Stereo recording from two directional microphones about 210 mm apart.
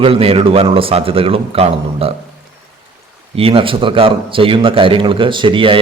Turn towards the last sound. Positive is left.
turn(degrees=-25)  # may be behind; listen again after turning